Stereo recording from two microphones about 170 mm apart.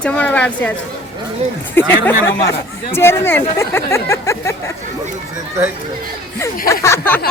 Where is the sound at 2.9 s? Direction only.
15° left (ahead or behind).